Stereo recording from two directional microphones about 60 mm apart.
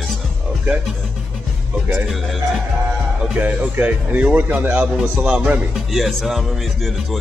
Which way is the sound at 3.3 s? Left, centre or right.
Right.